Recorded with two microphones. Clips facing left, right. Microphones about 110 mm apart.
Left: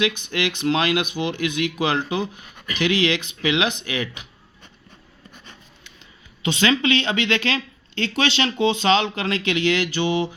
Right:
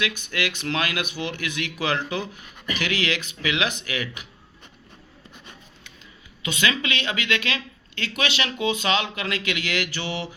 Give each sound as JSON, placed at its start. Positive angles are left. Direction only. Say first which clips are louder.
{"t": 0.0, "sound": "speech", "louder": "left 5 dB", "side_deg": 20}
{"t": 6.4, "sound": "speech", "louder": "left 5 dB", "side_deg": 30}